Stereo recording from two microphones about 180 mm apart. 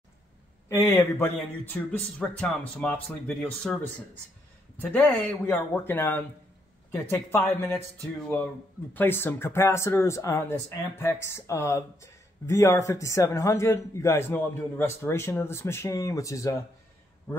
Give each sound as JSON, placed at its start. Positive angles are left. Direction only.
{"t": 0.7, "sound": "speech", "side_deg": 15}
{"t": 4.9, "sound": "speech", "side_deg": 10}
{"t": 8.9, "sound": "a man's voice", "side_deg": 10}